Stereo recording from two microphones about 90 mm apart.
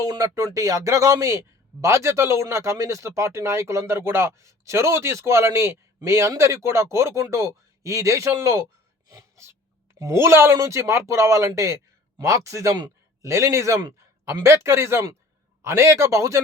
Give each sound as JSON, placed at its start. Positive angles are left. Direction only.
{"t": 0.0, "sound": "a man's voice", "side_deg": -45}